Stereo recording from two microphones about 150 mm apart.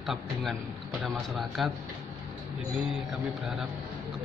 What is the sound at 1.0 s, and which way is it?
Speech, centre (ahead or behind).